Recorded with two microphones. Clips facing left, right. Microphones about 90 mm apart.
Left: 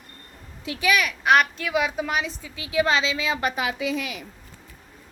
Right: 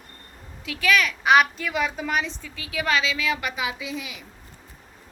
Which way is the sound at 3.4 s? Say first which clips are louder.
Left 4 dB; 50° left (ahead or behind).